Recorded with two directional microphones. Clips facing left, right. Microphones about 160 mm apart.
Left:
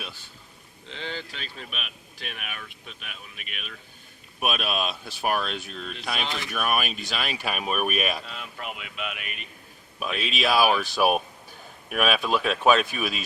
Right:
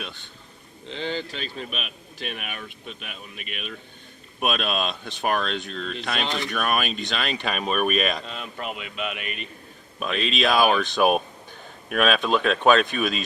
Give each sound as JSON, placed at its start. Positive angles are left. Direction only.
{"t": 0.9, "sound": "a man's voice", "side_deg": -30}
{"t": 4.4, "sound": "speech", "side_deg": 5}
{"t": 8.3, "sound": "a man's voice", "side_deg": -30}
{"t": 9.2, "sound": "a man's voice", "side_deg": 10}